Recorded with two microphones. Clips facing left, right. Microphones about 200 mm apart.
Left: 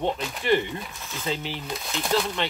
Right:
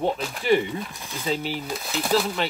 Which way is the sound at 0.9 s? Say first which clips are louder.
Right 2 dB; 15° right (ahead or behind).